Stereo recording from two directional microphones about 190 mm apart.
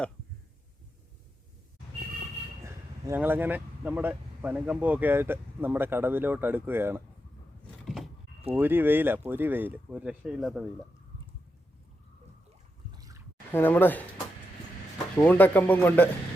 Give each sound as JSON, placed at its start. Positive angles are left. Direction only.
{"t": 2.6, "sound": "speech", "side_deg": -15}
{"t": 8.5, "sound": "speech", "side_deg": -10}
{"t": 12.9, "sound": "a sound", "side_deg": -20}
{"t": 13.5, "sound": "speech", "side_deg": 10}
{"t": 15.2, "sound": "speech", "side_deg": 10}